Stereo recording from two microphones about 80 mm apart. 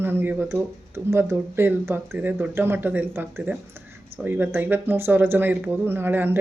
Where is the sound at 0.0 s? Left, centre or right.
Right.